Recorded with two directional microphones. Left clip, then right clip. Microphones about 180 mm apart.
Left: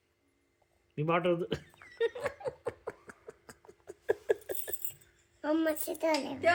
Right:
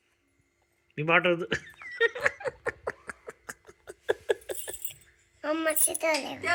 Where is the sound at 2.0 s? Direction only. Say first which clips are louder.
Right 7 dB; 5° left (ahead or behind).